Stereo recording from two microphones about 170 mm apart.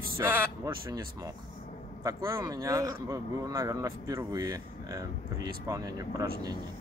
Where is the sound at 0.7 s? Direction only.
25° right (ahead or behind).